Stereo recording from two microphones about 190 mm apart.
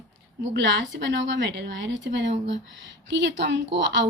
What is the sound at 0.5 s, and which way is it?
A woman's voice, 70° right (ahead or behind).